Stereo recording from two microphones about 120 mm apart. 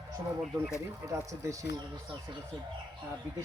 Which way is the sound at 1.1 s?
25° right (ahead or behind).